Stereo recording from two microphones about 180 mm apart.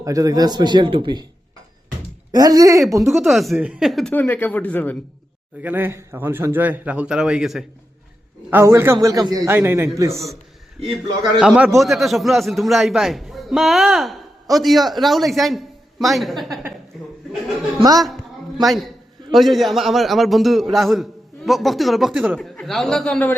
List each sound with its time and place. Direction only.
0.0 s speech: 20° right (ahead or behind)
2.3 s speech: 20° right (ahead or behind)
3.1 s a man's voice: centre (ahead or behind)
4.1 s speech: 10° left (ahead or behind)
5.6 s a man's voice: 10° right (ahead or behind)
8.4 s a man's voice: 15° right (ahead or behind)
11.3 s a man's voice: 5° right (ahead or behind)
16.9 s chuckle: centre (ahead or behind)
17.7 s speech: 20° right (ahead or behind)
18.6 s a man's voice: centre (ahead or behind)